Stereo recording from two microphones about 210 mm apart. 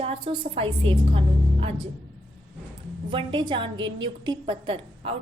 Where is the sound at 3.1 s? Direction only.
25° right (ahead or behind).